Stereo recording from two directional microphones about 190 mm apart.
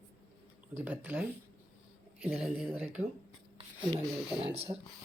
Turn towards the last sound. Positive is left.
turn(degrees=-30)  # may be behind; listen again after turning